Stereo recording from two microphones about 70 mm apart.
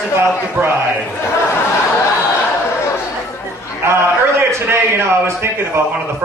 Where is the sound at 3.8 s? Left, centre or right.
Right.